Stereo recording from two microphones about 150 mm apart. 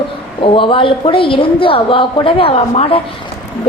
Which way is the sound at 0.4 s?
35° left (ahead or behind).